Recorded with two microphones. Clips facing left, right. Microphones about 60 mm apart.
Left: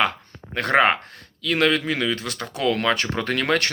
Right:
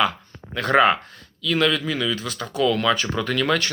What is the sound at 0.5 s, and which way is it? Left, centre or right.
Speech, left.